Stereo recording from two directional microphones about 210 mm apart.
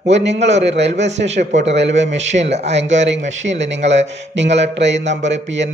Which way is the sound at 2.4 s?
30° right (ahead or behind).